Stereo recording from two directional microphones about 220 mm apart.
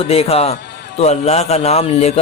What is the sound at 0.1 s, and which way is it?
A man's voice, 25° left (ahead or behind).